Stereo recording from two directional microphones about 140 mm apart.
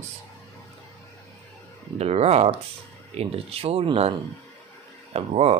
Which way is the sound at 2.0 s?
50° right (ahead or behind).